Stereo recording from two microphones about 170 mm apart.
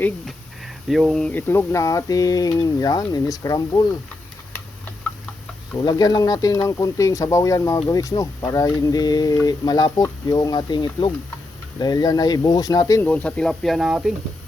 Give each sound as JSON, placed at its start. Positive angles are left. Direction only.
{"t": 0.0, "sound": "speech", "side_deg": 0}
{"t": 5.8, "sound": "speech", "side_deg": 25}
{"t": 13.1, "sound": "speech", "side_deg": 10}